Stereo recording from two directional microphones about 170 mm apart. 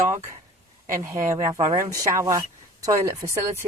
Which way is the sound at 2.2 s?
20° right (ahead or behind).